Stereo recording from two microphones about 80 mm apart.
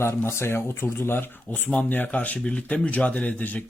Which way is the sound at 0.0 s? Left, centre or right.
Left.